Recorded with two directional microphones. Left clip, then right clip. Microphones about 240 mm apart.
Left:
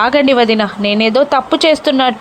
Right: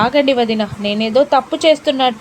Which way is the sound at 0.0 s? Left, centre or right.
Centre.